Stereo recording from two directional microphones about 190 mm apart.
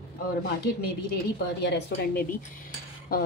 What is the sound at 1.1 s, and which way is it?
Speech, 60° left (ahead or behind).